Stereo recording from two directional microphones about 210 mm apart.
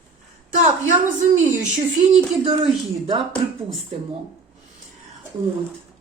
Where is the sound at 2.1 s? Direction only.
25° right (ahead or behind).